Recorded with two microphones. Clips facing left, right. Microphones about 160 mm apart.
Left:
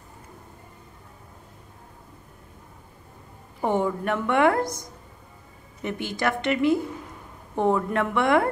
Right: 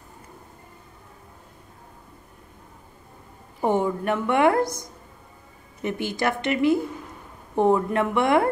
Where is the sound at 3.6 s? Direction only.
10° right (ahead or behind).